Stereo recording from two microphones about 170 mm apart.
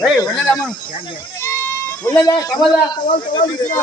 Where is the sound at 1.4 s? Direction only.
15° left (ahead or behind).